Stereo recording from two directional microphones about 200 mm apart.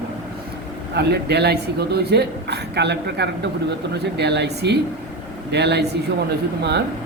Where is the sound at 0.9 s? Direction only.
55° right (ahead or behind).